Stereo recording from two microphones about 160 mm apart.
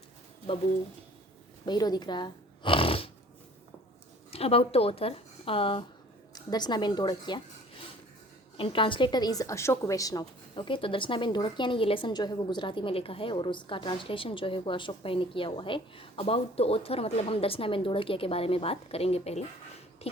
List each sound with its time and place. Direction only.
1.6 s speech: 25° left (ahead or behind)
4.3 s a woman's voice: 40° left (ahead or behind)